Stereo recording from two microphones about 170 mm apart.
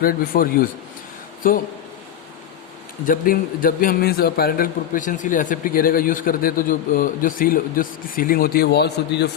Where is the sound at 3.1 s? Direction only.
55° left (ahead or behind).